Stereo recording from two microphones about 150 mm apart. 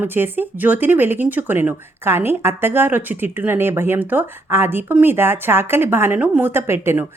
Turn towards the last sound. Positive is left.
turn(degrees=-15)  # may be behind; listen again after turning